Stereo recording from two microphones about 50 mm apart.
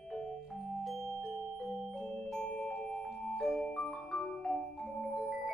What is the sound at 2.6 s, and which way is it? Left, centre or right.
Marimba, centre.